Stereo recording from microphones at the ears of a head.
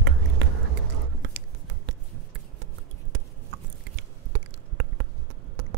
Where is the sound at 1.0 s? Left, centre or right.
Right.